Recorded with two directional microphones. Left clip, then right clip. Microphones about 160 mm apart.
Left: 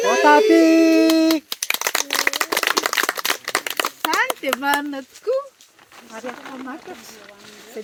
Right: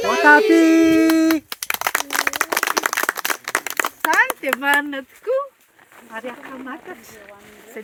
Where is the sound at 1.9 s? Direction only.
85° right.